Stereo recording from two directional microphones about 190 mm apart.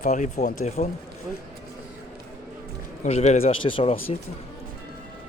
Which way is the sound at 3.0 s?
35° left (ahead or behind).